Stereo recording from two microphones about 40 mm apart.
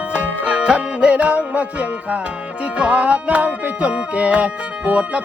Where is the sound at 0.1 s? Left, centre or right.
Right.